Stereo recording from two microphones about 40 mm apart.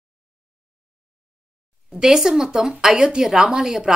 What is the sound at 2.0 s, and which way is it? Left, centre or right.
A woman's voice, centre.